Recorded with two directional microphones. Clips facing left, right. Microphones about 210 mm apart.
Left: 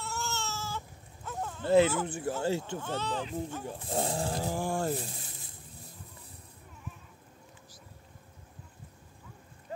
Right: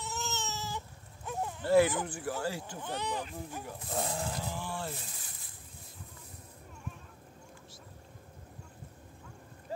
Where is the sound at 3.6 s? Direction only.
30° left (ahead or behind).